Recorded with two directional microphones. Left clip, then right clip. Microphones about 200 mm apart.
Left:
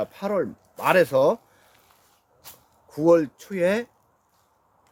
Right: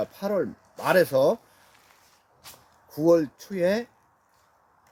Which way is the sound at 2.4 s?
10° left (ahead or behind).